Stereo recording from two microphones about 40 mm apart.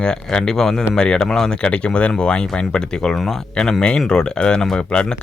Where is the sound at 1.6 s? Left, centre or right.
Left.